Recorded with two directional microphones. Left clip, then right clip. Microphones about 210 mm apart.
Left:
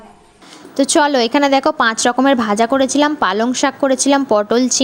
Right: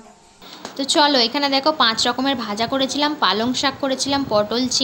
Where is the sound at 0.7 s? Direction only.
40° left (ahead or behind).